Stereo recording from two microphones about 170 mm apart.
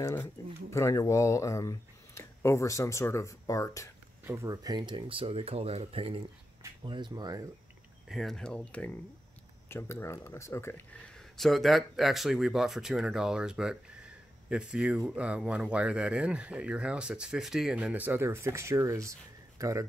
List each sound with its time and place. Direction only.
0.0 s speech: 15° left (ahead or behind)
4.2 s speech: 15° right (ahead or behind)
8.1 s speech: centre (ahead or behind); by 19.7 s 20° right (ahead or behind)